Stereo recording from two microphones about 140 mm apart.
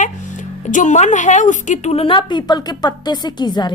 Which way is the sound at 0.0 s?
60° left (ahead or behind).